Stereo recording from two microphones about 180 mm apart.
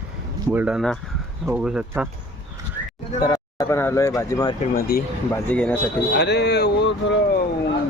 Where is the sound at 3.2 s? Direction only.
20° left (ahead or behind).